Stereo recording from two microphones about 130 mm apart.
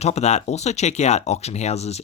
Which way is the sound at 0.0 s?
55° left (ahead or behind).